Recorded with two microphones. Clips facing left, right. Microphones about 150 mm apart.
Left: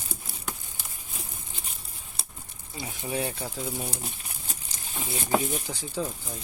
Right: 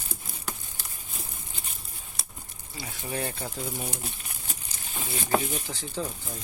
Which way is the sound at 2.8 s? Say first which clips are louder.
Left 2 dB; 20° left (ahead or behind).